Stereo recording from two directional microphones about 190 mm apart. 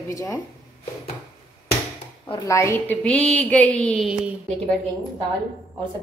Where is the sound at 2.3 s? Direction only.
15° left (ahead or behind); by 4.3 s centre (ahead or behind).